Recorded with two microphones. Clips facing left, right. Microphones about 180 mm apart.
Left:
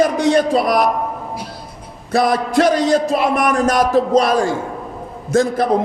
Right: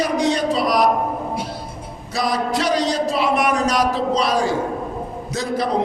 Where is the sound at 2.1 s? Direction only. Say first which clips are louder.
Left 6 dB; 55° left (ahead or behind).